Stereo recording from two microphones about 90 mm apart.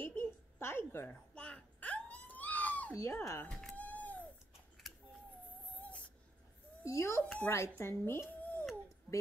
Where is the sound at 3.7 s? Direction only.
15° left (ahead or behind).